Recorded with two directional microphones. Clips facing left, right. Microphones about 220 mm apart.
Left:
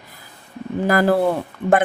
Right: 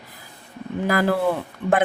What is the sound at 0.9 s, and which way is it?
Speech, 45° left (ahead or behind).